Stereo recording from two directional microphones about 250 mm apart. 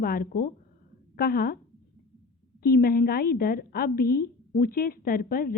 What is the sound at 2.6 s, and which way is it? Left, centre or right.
A woman's voice, left.